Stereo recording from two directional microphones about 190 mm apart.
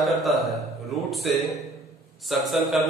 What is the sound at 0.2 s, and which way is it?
A man's voice, centre (ahead or behind).